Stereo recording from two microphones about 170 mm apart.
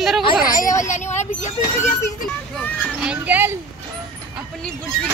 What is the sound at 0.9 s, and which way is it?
Speech, 45° left (ahead or behind).